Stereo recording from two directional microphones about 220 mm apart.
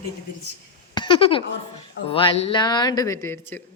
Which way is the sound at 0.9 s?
20° left (ahead or behind).